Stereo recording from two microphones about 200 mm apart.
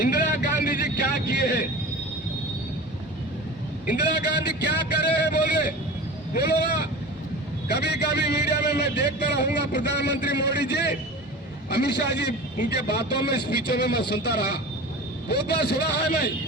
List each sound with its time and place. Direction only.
0.7 s vehicle: 55° left (ahead or behind)
3.9 s a sound: 55° left (ahead or behind)
6.3 s speech: 55° left (ahead or behind)
7.7 s a man's voice: 55° left (ahead or behind)